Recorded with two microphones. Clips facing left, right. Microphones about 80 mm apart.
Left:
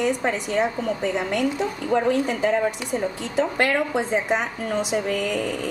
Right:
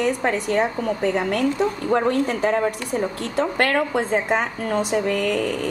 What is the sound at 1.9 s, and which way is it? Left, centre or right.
Speech, right.